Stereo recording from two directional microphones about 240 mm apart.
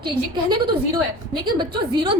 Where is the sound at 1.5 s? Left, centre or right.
Centre.